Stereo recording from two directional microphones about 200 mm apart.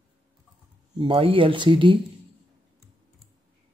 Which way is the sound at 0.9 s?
25° right (ahead or behind).